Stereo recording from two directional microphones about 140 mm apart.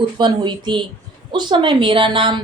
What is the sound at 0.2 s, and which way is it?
A woman's voice, 35° right (ahead or behind).